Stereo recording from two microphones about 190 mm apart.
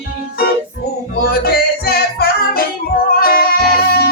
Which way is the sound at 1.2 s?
55° left (ahead or behind).